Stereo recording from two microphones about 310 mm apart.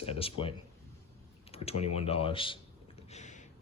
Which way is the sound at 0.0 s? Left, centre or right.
Centre.